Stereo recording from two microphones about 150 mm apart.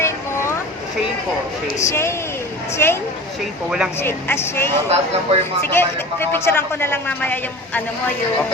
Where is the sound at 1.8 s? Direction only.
20° left (ahead or behind).